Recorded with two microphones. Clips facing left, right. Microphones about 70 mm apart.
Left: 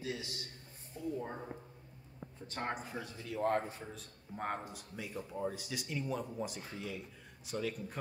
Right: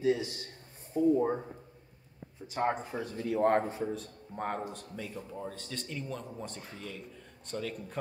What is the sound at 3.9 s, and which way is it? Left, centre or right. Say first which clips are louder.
A man's voice: right 8 dB; centre.